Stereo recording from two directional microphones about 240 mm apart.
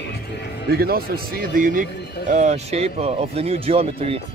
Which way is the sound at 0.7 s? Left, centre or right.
Right.